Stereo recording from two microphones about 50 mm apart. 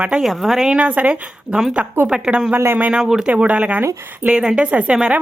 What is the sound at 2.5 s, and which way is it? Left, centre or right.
Speech, right.